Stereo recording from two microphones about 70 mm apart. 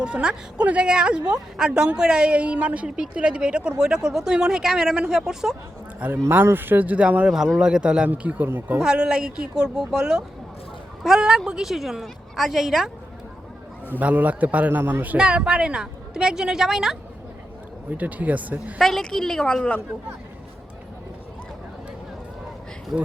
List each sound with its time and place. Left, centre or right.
0.0 s a woman's voice: centre
6.3 s a man's voice: right
7.3 s a woman's voice: centre
8.1 s a man's voice: right
8.8 s a woman's voice: centre
14.0 s a man's voice: right
15.2 s a woman's voice: centre
17.9 s a man's voice: right
18.8 s a woman's voice: centre